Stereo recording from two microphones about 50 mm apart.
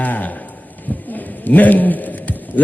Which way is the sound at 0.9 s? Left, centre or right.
Left.